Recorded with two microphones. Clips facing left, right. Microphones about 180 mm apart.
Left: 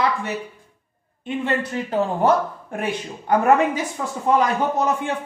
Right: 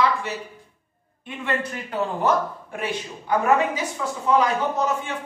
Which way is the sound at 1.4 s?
25° left (ahead or behind).